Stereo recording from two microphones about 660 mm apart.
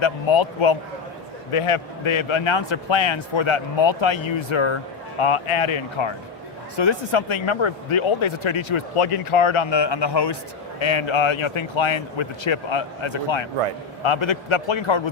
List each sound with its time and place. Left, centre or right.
0.0 s speech: left